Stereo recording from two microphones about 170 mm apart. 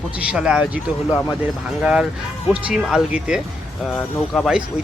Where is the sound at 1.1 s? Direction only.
20° left (ahead or behind).